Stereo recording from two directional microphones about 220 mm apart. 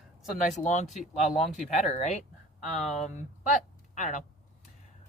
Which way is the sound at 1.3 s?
30° left (ahead or behind).